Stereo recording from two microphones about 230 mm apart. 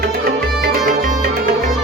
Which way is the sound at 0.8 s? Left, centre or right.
Right.